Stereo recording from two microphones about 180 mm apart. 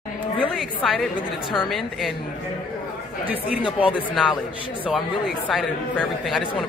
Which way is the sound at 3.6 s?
30° left (ahead or behind).